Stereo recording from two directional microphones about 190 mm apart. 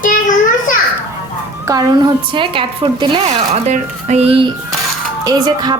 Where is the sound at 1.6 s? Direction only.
20° right (ahead or behind).